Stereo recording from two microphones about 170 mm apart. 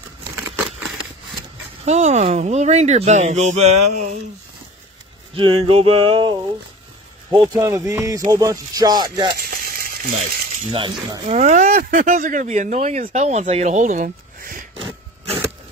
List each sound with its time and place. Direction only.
1.9 s speech: 45° right (ahead or behind)
5.3 s a sound: 35° right (ahead or behind)
7.3 s music: 20° right (ahead or behind)
9.3 s frying: 60° right (ahead or behind)
10.7 s speech: 35° right (ahead or behind); by 14.6 s 50° right (ahead or behind)
14.7 s a sound: 30° right (ahead or behind)